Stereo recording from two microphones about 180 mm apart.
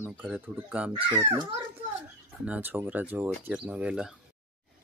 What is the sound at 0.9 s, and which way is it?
Speech, 30° right (ahead or behind).